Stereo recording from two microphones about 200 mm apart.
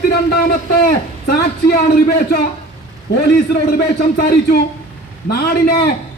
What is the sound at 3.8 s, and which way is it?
A man's voice, 50° left (ahead or behind).